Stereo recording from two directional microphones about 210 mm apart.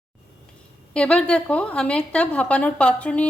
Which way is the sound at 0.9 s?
5° left (ahead or behind).